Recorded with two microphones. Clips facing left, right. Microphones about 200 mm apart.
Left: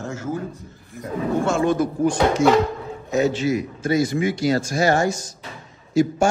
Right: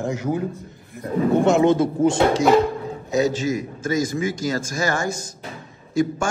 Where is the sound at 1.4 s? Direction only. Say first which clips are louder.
Right 3 dB; 20° right (ahead or behind).